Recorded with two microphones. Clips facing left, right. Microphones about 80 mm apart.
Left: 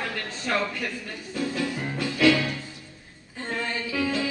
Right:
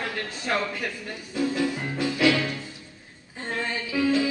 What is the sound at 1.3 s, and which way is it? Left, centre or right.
Music, centre.